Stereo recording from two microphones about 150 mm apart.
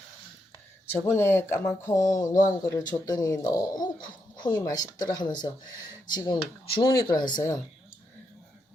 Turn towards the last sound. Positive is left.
turn(degrees=25)  # may be behind; listen again after turning